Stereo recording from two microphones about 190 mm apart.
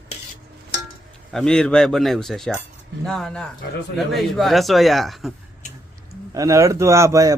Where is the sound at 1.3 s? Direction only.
5° left (ahead or behind).